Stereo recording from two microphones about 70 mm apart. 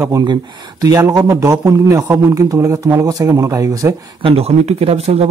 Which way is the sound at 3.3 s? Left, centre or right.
Right.